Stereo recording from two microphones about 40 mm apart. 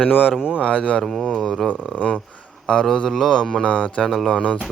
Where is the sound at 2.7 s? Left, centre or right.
Left.